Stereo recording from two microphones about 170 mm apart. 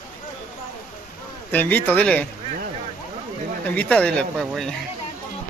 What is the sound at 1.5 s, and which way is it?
Speech, 10° left (ahead or behind).